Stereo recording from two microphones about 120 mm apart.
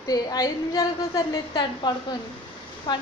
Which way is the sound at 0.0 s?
30° left (ahead or behind).